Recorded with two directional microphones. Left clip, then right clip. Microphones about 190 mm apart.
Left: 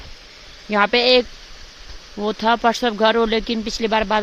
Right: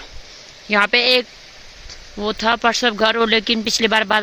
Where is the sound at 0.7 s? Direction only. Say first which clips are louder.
Even; 15° left (ahead or behind).